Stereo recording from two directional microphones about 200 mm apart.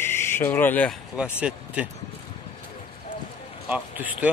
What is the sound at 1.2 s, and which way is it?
Speech, 5° right (ahead or behind).